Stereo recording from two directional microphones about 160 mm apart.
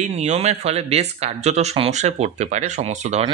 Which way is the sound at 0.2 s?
45° right (ahead or behind).